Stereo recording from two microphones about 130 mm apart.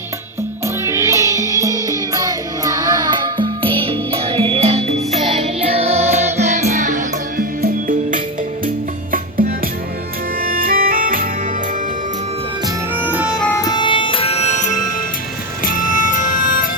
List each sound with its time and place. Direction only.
0.9 s music: 20° right (ahead or behind); by 7.4 s 70° right (ahead or behind)
10.4 s music: 90° right
13.0 s music: 15° right (ahead or behind)
13.6 s music: 30° left (ahead or behind); by 14.7 s 60° left (ahead or behind)
15.6 s music: 90° left